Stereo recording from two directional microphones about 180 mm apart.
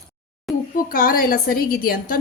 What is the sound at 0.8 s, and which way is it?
A woman's voice, 50° left (ahead or behind).